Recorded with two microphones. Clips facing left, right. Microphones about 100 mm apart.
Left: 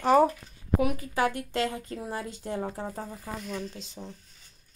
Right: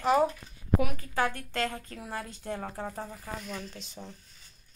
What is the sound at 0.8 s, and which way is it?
Speech, 25° left (ahead or behind).